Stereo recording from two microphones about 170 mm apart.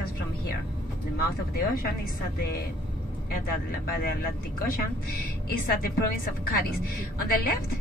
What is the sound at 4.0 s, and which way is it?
A woman's voice, 60° left (ahead or behind).